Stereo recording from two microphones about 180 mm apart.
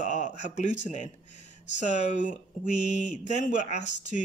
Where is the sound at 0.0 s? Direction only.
45° left (ahead or behind).